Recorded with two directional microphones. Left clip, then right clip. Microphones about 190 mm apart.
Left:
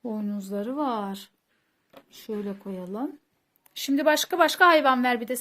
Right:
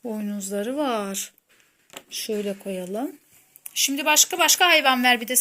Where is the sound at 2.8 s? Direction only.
Centre (ahead or behind).